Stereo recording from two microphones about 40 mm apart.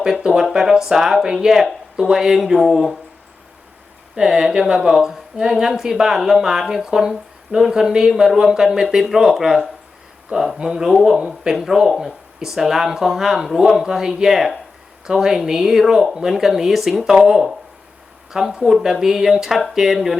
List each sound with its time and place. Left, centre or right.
0.5 s speech: centre
4.1 s speech: centre
11.3 s speech: centre
18.4 s speech: centre